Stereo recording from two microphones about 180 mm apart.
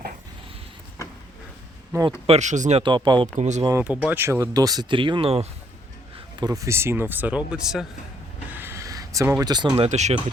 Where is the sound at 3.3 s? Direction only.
40° right (ahead or behind).